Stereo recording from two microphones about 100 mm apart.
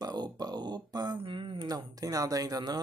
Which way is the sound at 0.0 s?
40° right (ahead or behind).